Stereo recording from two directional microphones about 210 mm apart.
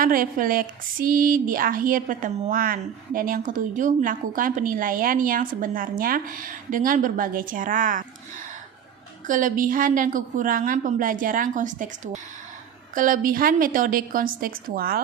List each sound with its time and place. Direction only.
0.0 s speech: 40° right (ahead or behind)